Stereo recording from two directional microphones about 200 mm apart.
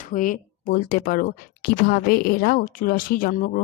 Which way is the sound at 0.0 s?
40° left (ahead or behind).